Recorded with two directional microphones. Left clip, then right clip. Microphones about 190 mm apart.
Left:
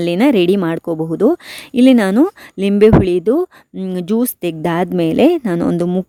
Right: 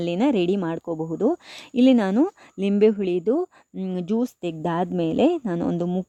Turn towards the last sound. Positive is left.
turn(degrees=40)  # may be behind; listen again after turning